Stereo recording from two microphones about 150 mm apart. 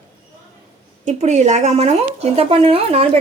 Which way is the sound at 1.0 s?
50° right (ahead or behind).